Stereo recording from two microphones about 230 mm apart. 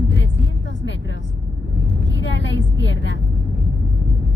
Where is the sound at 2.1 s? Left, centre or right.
Left.